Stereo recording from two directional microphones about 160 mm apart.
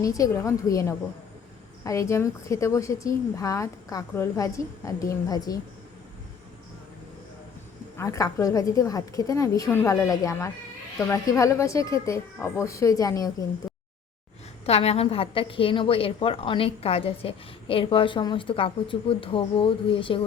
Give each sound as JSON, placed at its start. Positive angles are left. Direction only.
{"t": 0.0, "sound": "speech", "side_deg": 20}
{"t": 7.9, "sound": "speech", "side_deg": 20}
{"t": 14.7, "sound": "a woman's voice", "side_deg": 40}